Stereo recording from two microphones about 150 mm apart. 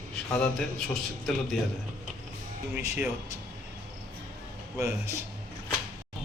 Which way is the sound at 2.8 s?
15° right (ahead or behind).